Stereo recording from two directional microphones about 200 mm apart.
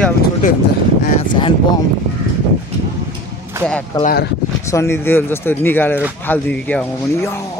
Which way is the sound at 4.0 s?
45° left (ahead or behind).